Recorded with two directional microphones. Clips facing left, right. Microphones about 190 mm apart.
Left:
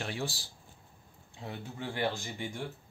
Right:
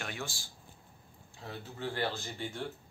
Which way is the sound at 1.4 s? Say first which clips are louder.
Even; 15° left (ahead or behind).